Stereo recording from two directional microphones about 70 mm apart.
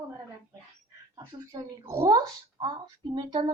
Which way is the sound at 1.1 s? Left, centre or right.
Right.